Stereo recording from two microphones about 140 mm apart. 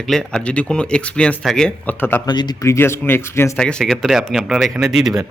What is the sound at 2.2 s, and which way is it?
Speech, 30° left (ahead or behind).